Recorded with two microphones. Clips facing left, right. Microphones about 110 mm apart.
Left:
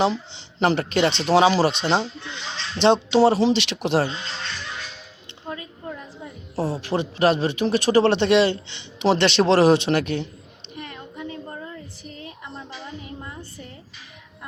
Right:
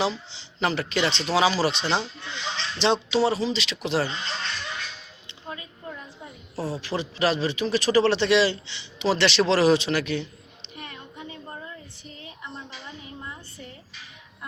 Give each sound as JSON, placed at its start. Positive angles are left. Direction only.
{"t": 0.0, "sound": "speech", "side_deg": 55}
{"t": 6.6, "sound": "a man's voice", "side_deg": 25}
{"t": 6.8, "sound": "a man's voice", "side_deg": 50}